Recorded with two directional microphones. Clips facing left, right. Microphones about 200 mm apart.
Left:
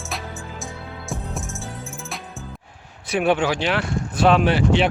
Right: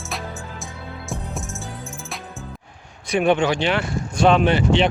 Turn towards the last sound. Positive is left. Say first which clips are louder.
# right 1 dB
turn(degrees=5)  # may be behind; listen again after turning